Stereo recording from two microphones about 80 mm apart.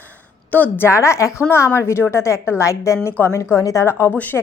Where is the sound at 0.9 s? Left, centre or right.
Left.